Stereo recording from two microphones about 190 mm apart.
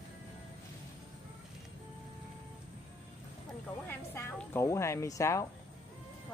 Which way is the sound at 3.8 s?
10° left (ahead or behind).